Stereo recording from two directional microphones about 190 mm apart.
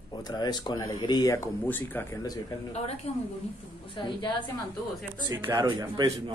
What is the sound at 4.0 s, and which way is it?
Speech, 25° left (ahead or behind).